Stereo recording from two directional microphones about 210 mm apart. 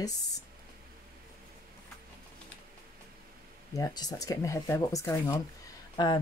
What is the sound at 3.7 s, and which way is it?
Speech, 15° left (ahead or behind).